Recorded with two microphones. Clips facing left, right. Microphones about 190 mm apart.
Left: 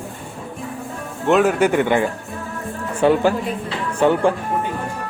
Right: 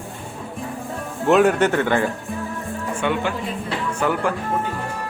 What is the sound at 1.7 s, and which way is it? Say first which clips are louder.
Speech: left 2 dB; 15° left (ahead or behind).